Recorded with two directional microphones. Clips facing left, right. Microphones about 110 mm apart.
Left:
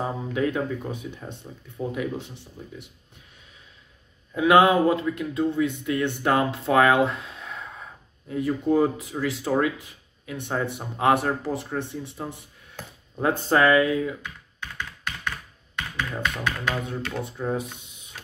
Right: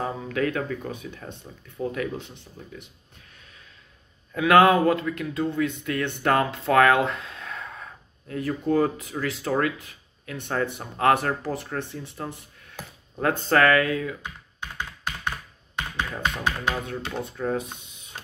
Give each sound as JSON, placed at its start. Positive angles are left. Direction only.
{"t": 0.0, "sound": "speech", "side_deg": 15}
{"t": 2.1, "sound": "tap", "side_deg": -20}
{"t": 4.4, "sound": "speech", "side_deg": 15}
{"t": 16.0, "sound": "tap", "side_deg": -25}
{"t": 17.2, "sound": "speech", "side_deg": 10}